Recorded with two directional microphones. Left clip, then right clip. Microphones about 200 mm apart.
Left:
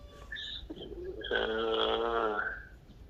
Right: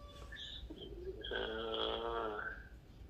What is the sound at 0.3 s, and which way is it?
Bird, 55° left (ahead or behind).